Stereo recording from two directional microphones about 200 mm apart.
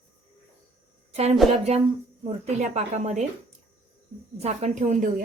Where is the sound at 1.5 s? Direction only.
30° right (ahead or behind).